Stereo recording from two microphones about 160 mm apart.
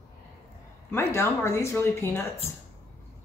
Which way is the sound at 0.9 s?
20° left (ahead or behind).